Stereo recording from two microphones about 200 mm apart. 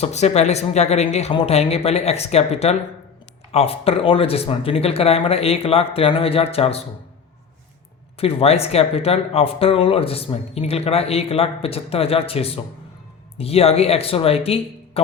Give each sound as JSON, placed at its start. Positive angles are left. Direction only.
{"t": 0.0, "sound": "speech", "side_deg": 35}
{"t": 8.2, "sound": "speech", "side_deg": 30}